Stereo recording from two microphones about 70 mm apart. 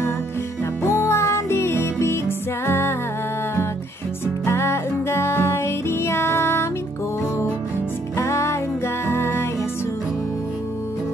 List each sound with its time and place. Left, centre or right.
0.8 s music: left
4.5 s music: left
8.2 s music: left